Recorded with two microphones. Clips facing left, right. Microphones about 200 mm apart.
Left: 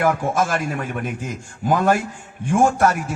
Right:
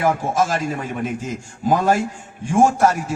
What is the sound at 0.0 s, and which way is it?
Speech, 55° left (ahead or behind).